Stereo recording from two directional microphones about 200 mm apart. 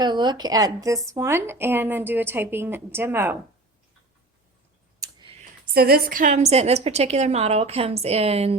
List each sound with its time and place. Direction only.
0.0 s a woman's voice: 20° right (ahead or behind)
4.9 s clicking: 15° right (ahead or behind)
5.7 s a woman's voice: 50° right (ahead or behind); by 8.5 s 30° right (ahead or behind)